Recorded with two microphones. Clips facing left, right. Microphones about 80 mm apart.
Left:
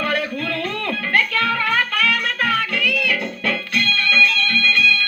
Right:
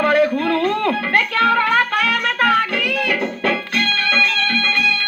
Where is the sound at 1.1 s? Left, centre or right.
Right.